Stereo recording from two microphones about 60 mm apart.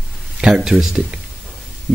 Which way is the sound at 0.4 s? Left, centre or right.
Centre.